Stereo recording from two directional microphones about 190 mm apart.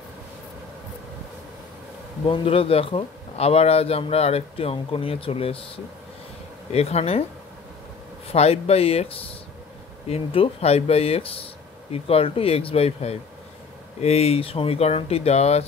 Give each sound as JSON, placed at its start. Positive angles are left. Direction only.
{"t": 2.2, "sound": "speech", "side_deg": 30}
{"t": 6.7, "sound": "speech", "side_deg": 35}
{"t": 8.3, "sound": "speech", "side_deg": 35}